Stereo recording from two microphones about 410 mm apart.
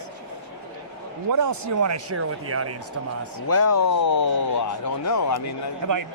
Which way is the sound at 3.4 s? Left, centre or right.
Left.